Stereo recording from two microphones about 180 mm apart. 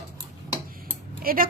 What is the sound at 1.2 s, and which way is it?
Typing, 55° right (ahead or behind).